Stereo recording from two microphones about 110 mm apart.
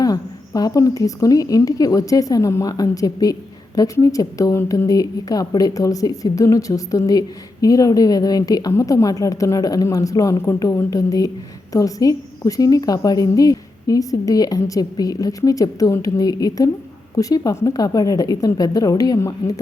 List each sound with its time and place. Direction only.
0.0 s a woman's voice: 35° left (ahead or behind)